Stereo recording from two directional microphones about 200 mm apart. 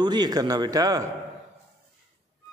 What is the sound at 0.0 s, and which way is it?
Speech, 20° right (ahead or behind).